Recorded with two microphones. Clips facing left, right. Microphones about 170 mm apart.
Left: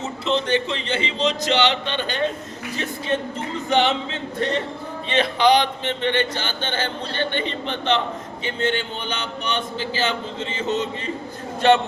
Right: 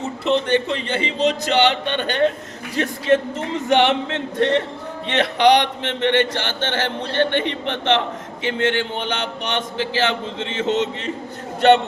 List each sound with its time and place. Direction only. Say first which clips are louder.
0.4 s speech: right 3 dB; 50° right (ahead or behind)
2.7 s speech: right 7 dB; 85° right
5.0 s a sound: right 2 dB; 70° right (ahead or behind); by 8.0 s 90° right
8.4 s speech: right 3 dB; 90° right